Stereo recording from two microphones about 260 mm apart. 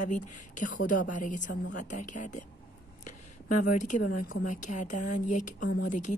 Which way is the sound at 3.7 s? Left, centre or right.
Left.